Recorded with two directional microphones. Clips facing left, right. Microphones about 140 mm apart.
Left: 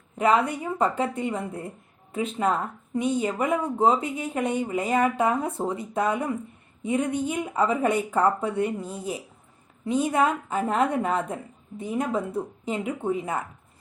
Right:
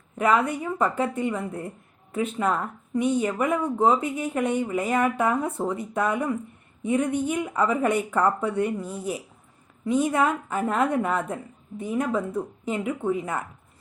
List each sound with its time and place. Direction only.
0.2 s speech: 25° left (ahead or behind)